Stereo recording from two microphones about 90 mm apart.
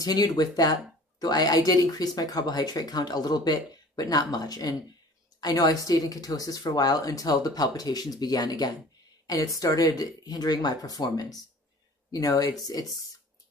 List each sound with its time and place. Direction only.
0.0 s speech: 45° left (ahead or behind)